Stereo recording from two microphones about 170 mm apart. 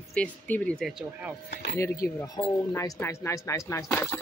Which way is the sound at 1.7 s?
15° left (ahead or behind).